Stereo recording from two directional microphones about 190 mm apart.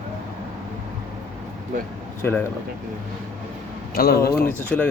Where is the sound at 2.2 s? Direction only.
10° left (ahead or behind).